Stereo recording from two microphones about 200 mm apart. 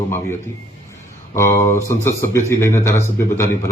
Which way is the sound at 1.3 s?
15° left (ahead or behind).